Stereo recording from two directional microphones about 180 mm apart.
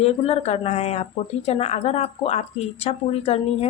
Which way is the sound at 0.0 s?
35° left (ahead or behind).